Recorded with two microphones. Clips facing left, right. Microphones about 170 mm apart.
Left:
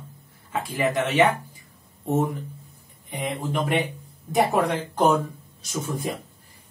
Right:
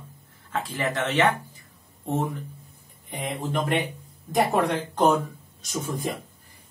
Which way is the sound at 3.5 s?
Centre (ahead or behind).